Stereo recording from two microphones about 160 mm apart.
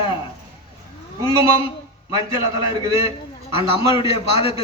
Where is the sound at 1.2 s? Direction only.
20° right (ahead or behind).